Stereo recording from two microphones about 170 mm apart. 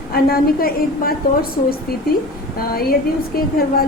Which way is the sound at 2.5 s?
60° left (ahead or behind).